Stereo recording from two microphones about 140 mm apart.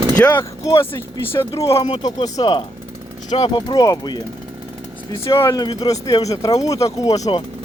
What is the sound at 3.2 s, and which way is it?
Speech, 45° left (ahead or behind).